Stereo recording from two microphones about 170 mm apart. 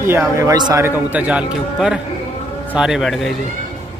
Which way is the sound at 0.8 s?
10° right (ahead or behind).